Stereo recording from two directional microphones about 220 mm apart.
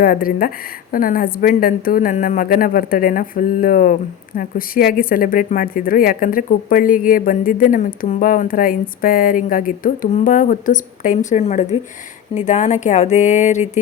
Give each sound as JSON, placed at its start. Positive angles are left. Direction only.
{"t": 0.0, "sound": "speech", "side_deg": 40}